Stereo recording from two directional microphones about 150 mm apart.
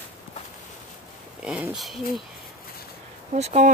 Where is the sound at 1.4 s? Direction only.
5° right (ahead or behind).